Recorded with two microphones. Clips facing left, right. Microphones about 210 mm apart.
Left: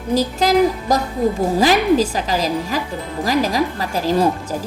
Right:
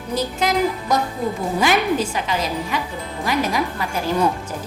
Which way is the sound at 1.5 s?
35° left (ahead or behind).